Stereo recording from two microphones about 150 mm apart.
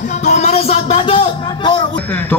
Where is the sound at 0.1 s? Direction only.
50° left (ahead or behind).